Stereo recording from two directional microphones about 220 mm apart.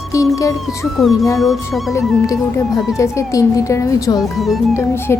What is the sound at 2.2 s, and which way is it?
A child's voice, 15° left (ahead or behind).